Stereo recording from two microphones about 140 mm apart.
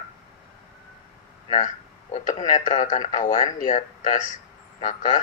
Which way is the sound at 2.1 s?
55° left (ahead or behind).